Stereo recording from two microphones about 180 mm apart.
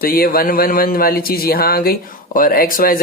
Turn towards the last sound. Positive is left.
turn(degrees=50)  # may be behind; listen again after turning